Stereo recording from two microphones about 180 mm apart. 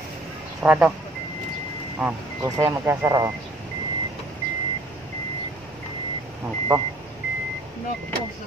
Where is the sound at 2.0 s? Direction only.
15° right (ahead or behind).